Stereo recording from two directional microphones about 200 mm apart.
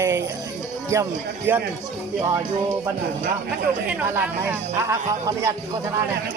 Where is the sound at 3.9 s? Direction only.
10° right (ahead or behind).